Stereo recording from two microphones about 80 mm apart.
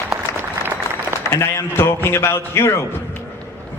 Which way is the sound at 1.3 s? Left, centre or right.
Left.